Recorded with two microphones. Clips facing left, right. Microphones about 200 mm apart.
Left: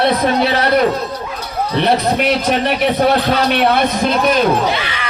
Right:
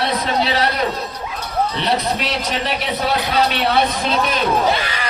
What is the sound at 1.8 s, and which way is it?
A man's voice, 55° left (ahead or behind).